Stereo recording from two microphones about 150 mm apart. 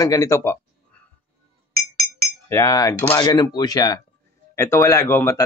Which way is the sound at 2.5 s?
20° left (ahead or behind).